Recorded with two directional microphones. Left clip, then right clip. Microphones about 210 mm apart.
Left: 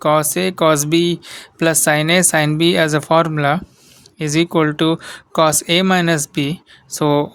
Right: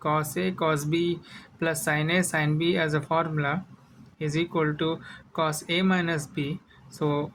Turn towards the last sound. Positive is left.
turn(degrees=55)  # may be behind; listen again after turning